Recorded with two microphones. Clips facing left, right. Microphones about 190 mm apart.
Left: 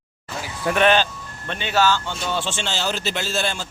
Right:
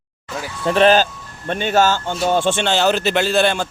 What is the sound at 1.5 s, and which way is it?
Speech, 50° right (ahead or behind).